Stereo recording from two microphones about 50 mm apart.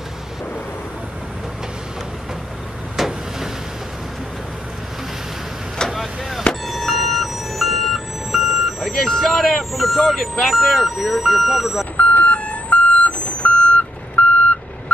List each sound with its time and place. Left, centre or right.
3.0 s a sound: centre
5.9 s vehicle: centre
8.9 s speech: centre
12.0 s reversing beeps: left